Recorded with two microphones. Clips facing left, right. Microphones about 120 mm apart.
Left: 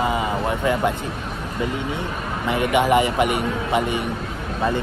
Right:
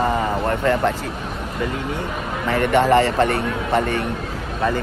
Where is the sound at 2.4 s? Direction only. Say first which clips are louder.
Right 2 dB; 10° left (ahead or behind).